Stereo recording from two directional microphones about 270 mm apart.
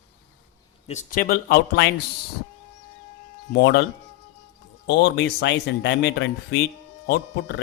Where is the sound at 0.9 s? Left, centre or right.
Left.